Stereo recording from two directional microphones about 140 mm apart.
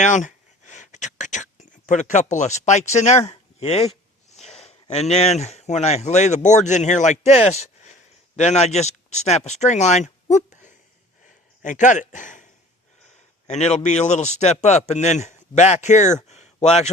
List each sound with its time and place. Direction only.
0.0 s speech: 60° left (ahead or behind)
13.5 s a man's voice: 55° left (ahead or behind)